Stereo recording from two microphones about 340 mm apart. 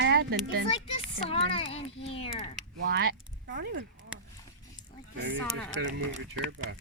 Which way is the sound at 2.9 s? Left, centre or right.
Right.